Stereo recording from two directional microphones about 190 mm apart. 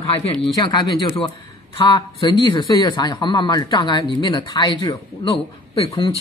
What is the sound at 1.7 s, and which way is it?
Speech, 25° left (ahead or behind).